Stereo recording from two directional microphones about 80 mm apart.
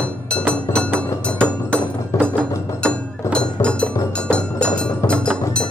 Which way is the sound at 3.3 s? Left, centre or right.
Centre.